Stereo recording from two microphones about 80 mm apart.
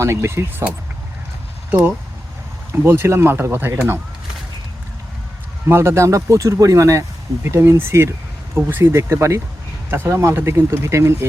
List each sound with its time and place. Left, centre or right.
0.0 s speech: right
1.7 s speech: right
5.6 s speech: right